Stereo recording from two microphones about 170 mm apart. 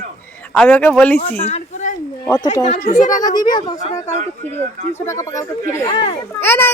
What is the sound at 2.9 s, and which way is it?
Speech, 50° left (ahead or behind).